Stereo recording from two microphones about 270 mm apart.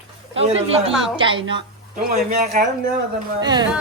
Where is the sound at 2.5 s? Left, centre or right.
Right.